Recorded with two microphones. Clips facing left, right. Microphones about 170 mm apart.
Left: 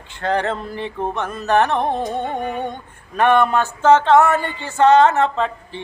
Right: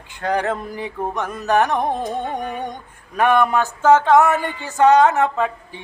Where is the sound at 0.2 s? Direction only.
10° right (ahead or behind).